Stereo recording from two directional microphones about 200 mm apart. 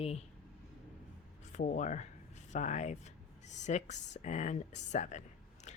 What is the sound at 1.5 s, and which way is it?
Speech, 40° left (ahead or behind).